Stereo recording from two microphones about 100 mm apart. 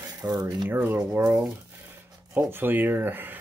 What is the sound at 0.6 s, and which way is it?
Speech, 20° right (ahead or behind).